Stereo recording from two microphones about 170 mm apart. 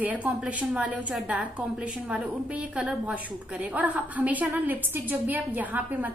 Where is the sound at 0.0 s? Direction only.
10° right (ahead or behind).